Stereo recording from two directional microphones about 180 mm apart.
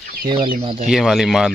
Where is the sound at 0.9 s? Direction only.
Centre (ahead or behind).